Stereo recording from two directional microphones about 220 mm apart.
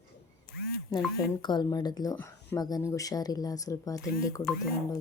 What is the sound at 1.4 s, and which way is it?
Speech, 20° left (ahead or behind).